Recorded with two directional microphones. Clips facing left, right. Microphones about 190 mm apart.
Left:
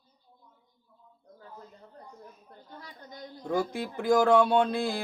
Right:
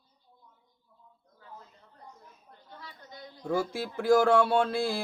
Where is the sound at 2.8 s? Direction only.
45° left (ahead or behind).